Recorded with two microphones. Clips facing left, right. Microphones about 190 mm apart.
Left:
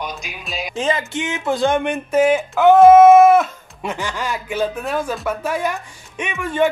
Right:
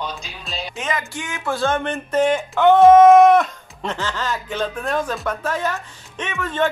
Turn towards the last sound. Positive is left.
turn(degrees=10)  # may be behind; listen again after turning